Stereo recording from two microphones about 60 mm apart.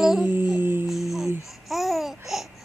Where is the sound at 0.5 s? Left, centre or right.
Right.